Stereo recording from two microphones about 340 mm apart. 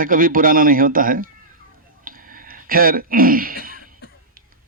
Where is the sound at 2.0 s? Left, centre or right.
Right.